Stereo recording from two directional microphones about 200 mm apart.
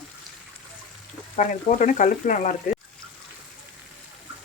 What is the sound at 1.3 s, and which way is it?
Speech, 40° left (ahead or behind).